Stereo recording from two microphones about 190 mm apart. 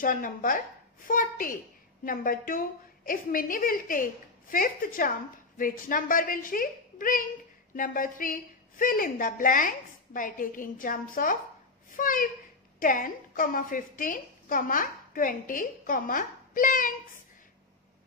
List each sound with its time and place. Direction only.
0.0 s a woman's voice: 45° left (ahead or behind)